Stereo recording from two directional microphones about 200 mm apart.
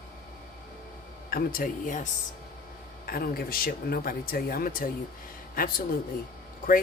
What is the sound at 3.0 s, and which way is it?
Speech, 45° left (ahead or behind).